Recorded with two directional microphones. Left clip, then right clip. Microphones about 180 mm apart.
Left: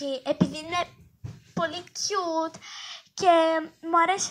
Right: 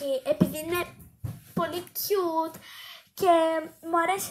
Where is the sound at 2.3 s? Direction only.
40° left (ahead or behind).